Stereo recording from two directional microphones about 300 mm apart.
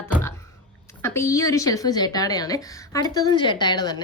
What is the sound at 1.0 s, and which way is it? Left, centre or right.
A woman's voice, centre.